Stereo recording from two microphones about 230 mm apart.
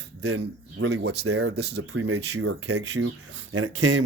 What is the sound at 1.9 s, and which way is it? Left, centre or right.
Speech, right.